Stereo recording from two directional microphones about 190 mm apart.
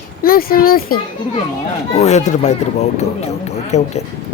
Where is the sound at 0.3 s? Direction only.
50° left (ahead or behind).